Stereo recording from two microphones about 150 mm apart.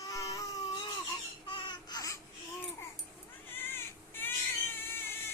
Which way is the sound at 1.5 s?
30° left (ahead or behind).